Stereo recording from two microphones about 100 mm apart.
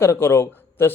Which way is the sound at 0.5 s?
20° left (ahead or behind).